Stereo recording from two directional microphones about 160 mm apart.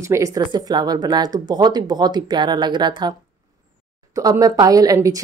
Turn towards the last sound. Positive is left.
turn(degrees=-20)  # may be behind; listen again after turning